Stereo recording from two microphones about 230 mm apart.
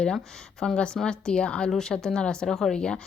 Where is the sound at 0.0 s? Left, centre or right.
Centre.